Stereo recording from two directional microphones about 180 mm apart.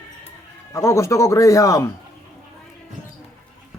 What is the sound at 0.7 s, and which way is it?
Speech, 15° left (ahead or behind).